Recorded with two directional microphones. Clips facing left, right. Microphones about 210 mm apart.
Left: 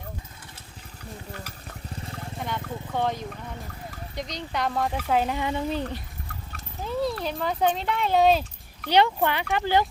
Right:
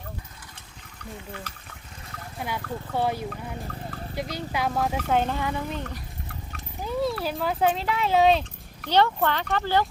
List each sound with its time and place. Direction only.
2.4 s speech: 5° right (ahead or behind)
5.4 s speech: 25° left (ahead or behind)
6.8 s speech: centre (ahead or behind)
8.9 s speech: 15° left (ahead or behind)